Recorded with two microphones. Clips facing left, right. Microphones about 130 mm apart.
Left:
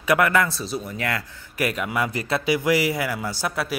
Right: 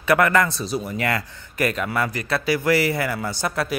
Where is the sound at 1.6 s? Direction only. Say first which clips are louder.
Right 1 dB; 10° left (ahead or behind).